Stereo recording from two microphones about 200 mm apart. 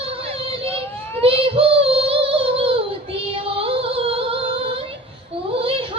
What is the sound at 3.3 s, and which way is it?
Music, 30° right (ahead or behind).